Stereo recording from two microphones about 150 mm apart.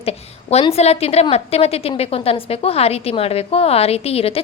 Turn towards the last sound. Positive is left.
turn(degrees=40)  # may be behind; listen again after turning